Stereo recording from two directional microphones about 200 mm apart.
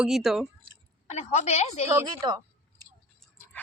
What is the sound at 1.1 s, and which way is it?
Speech, 35° left (ahead or behind).